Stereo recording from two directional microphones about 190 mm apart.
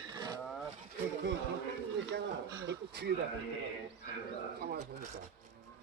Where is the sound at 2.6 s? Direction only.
60° right (ahead or behind).